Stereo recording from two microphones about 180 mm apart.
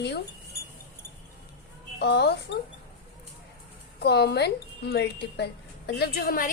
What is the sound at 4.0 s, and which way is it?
Speech, 65° left (ahead or behind).